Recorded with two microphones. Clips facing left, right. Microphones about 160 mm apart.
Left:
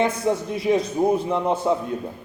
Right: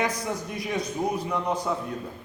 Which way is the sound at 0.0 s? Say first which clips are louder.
Left 7 dB; 30° left (ahead or behind).